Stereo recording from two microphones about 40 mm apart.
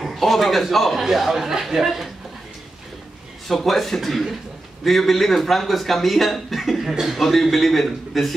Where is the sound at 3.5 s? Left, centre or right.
Centre.